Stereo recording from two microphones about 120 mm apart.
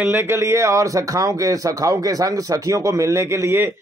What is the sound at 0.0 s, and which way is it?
Speech, 20° right (ahead or behind).